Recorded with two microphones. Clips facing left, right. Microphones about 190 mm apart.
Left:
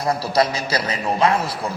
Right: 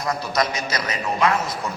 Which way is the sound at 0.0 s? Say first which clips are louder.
Left 4 dB; 30° left (ahead or behind).